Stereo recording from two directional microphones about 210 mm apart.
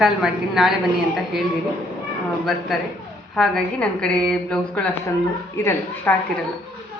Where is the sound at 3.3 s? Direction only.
Centre (ahead or behind).